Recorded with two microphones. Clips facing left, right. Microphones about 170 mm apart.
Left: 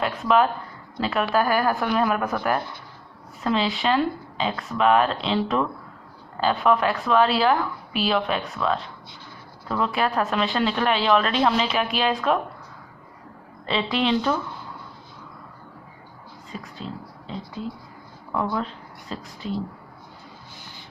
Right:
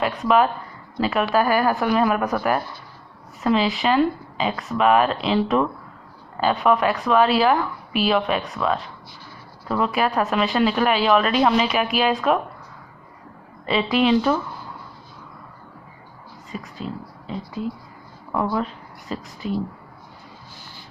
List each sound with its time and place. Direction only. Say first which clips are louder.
0.2 s a woman's voice: right 1 dB; 5° right (ahead or behind)
13.9 s a woman's voice: right 5 dB; 10° right (ahead or behind)
16.5 s a sound: right 4 dB; 10° right (ahead or behind)
17.6 s a woman's voice: right 4 dB; 10° right (ahead or behind)